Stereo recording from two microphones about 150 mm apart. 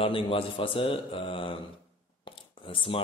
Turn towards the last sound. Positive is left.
turn(degrees=35)  # may be behind; listen again after turning